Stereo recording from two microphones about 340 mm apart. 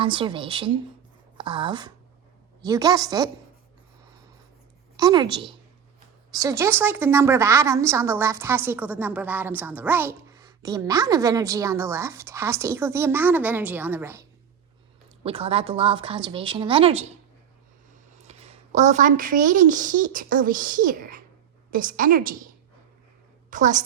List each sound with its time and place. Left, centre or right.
0.0 s a woman's voice: centre
4.9 s a woman's voice: centre
6.3 s a woman's voice: centre
18.2 s a woman's voice: centre
23.5 s a woman's voice: right